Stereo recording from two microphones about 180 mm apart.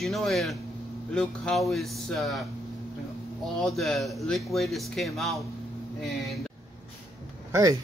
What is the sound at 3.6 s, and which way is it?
Speech, centre (ahead or behind).